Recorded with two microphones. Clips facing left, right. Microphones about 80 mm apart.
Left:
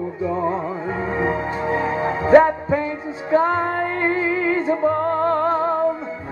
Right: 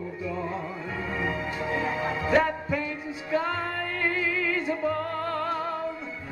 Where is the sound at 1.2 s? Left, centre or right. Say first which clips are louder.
Left 8 dB; left.